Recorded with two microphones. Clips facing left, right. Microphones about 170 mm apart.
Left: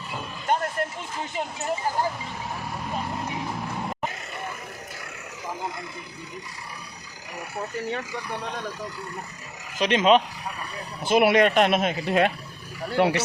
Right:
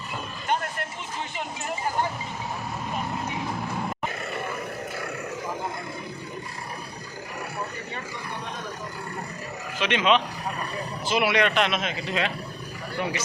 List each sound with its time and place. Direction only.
9.7 s speech: 40° left (ahead or behind)
11.0 s speech: 50° left (ahead or behind)
13.0 s speech: 70° left (ahead or behind)